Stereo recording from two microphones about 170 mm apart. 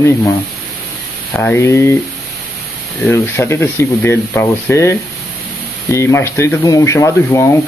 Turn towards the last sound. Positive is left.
turn(degrees=15)  # may be behind; listen again after turning